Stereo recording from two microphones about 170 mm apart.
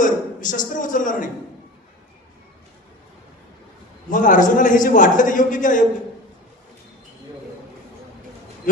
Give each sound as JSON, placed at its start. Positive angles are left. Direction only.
{"t": 0.0, "sound": "a man's voice", "side_deg": 50}
{"t": 4.1, "sound": "a man's voice", "side_deg": 50}